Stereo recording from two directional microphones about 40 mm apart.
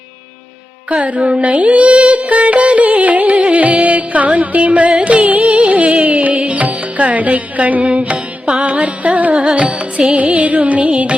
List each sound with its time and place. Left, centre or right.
0.9 s music: right